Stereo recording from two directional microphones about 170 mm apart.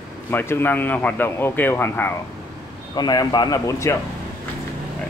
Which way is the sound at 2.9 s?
25° left (ahead or behind).